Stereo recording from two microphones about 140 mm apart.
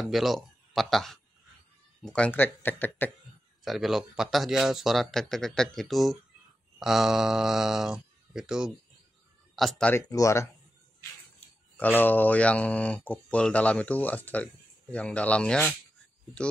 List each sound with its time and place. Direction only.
0.0 s speech: centre (ahead or behind)
3.6 s speech: centre (ahead or behind)
10.0 s speech: 25° left (ahead or behind)
11.3 s speech: 10° left (ahead or behind)